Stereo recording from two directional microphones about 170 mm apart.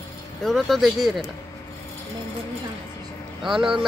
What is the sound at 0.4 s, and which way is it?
Speech, centre (ahead or behind).